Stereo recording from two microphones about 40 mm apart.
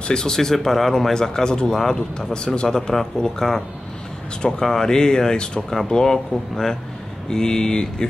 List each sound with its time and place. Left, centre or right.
0.1 s speech: centre
5.7 s speech: centre